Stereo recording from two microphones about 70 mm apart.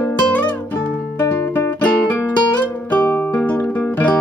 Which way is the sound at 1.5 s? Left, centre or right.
Left.